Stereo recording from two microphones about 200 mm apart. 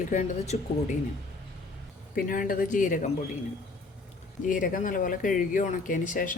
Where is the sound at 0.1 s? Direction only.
40° left (ahead or behind).